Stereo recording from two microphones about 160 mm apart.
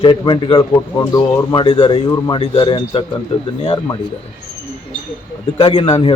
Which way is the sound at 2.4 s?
35° left (ahead or behind).